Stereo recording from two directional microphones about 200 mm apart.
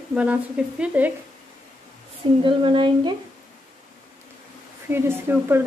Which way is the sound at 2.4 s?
25° right (ahead or behind).